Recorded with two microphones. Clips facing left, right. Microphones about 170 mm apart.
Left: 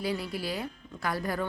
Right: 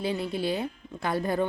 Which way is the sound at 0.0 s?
25° right (ahead or behind).